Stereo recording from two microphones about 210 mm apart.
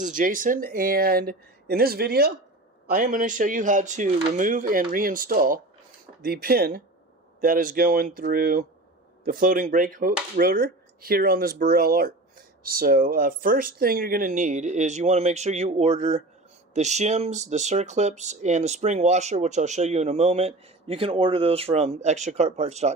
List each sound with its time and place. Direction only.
0.0 s speech: 40° right (ahead or behind)